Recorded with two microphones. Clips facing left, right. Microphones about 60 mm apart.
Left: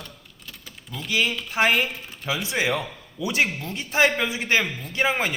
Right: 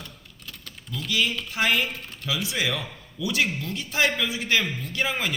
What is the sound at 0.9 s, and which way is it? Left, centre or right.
A man's voice, left.